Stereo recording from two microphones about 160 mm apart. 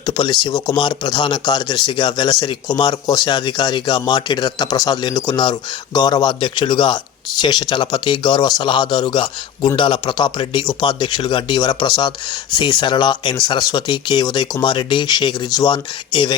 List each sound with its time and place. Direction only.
0.0 s speech: 30° left (ahead or behind)